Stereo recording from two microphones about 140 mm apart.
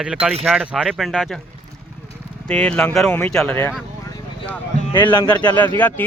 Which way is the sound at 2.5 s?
5° left (ahead or behind).